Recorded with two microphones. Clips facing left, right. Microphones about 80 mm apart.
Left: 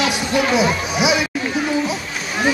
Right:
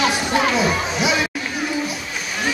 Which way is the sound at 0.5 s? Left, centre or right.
Centre.